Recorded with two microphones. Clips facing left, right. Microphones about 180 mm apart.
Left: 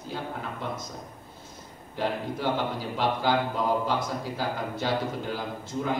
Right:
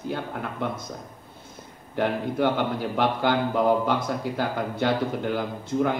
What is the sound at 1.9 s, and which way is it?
Speech, 60° right (ahead or behind).